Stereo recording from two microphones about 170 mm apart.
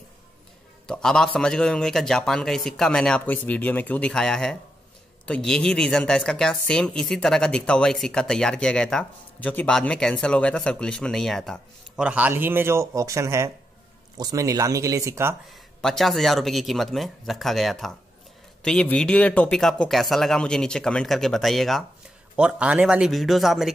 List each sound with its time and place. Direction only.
0.8 s speech: 5° left (ahead or behind)
12.1 s speech: 10° right (ahead or behind)
15.8 s speech: centre (ahead or behind)